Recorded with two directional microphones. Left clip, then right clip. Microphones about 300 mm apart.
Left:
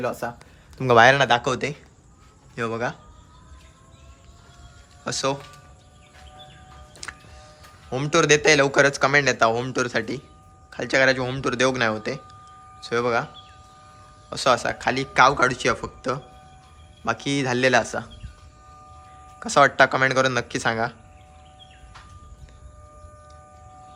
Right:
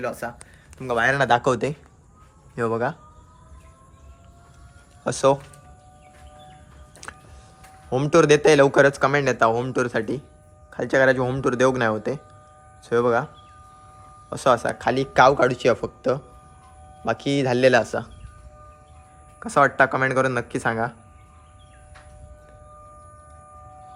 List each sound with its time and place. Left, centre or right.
0.8 s speech: left
1.1 s a man's voice: centre
5.0 s speech: centre
7.0 s music: centre
7.9 s a man's voice: centre
14.3 s a man's voice: centre
19.4 s a man's voice: centre